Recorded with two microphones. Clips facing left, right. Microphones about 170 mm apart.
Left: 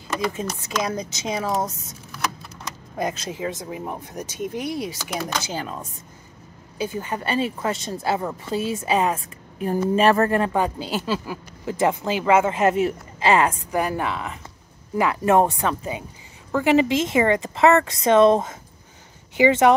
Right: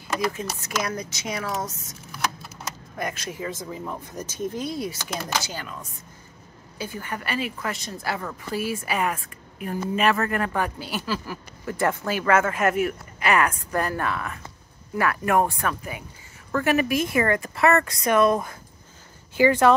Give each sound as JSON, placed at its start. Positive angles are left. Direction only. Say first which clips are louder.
{"t": 0.8, "sound": "a woman's voice", "louder": "left 3 dB", "side_deg": 20}
{"t": 2.2, "sound": "keys jangling", "louder": "even", "side_deg": -5}
{"t": 3.0, "sound": "a woman's voice", "louder": "left 5 dB", "side_deg": 25}
{"t": 4.9, "sound": "speech", "louder": "left 2 dB", "side_deg": -5}
{"t": 6.8, "sound": "a woman's voice", "louder": "left 5 dB", "side_deg": 20}
{"t": 13.7, "sound": "a woman's voice", "louder": "left 2 dB", "side_deg": 15}